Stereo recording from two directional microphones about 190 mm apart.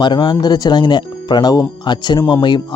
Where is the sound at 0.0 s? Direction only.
20° left (ahead or behind).